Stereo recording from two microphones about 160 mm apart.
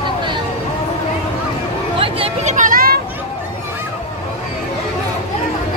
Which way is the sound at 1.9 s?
35° right (ahead or behind).